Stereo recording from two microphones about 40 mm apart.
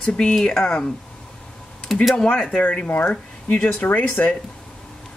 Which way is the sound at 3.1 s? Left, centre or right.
Left.